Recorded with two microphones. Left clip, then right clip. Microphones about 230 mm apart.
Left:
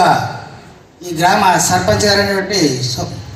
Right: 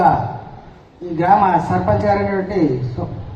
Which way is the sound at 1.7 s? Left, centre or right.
Left.